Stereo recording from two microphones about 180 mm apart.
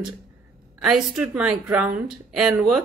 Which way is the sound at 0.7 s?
Centre (ahead or behind).